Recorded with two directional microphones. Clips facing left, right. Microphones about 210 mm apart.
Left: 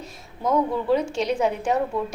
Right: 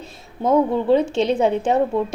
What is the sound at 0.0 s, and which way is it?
A woman's voice, 25° right (ahead or behind).